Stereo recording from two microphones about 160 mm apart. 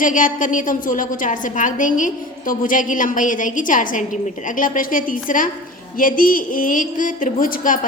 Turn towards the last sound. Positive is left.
turn(degrees=60)  # may be behind; listen again after turning